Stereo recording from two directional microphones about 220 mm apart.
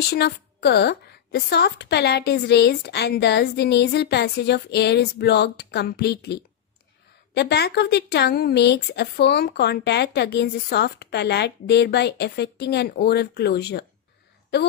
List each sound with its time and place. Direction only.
0.1 s speech: 50° left (ahead or behind)